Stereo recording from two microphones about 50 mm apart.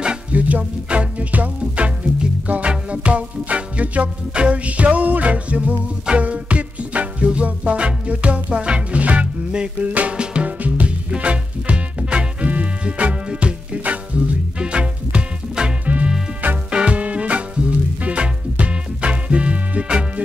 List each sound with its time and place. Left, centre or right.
0.3 s music: right